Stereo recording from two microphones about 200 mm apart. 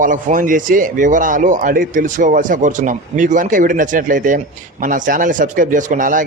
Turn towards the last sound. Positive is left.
turn(degrees=-40)  # may be behind; listen again after turning